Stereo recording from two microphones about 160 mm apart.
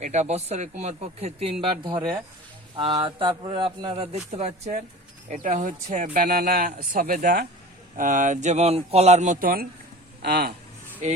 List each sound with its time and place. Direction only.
0.0 s a man's voice: 45° right (ahead or behind); by 9.6 s 60° right (ahead or behind)
10.2 s speech: 85° right
11.0 s speech: 50° right (ahead or behind)